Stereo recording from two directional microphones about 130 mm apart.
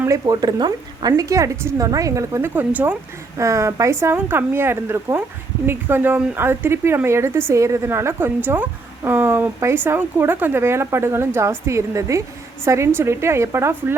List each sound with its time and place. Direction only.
0.0 s a woman's voice: 25° right (ahead or behind)